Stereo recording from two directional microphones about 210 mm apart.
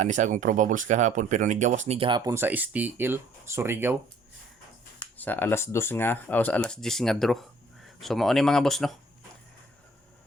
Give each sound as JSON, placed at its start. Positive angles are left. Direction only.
{"t": 0.0, "sound": "speech", "side_deg": -35}
{"t": 5.1, "sound": "speech", "side_deg": 10}